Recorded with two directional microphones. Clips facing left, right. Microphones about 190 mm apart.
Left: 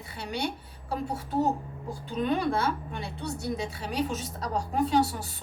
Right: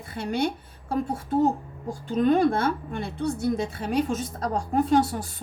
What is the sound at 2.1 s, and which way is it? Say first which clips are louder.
A woman's voice: right 7 dB; 50° right (ahead or behind).